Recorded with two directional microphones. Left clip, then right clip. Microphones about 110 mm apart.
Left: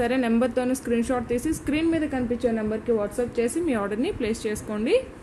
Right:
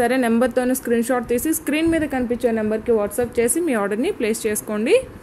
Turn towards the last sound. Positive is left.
turn(degrees=-35)  # may be behind; listen again after turning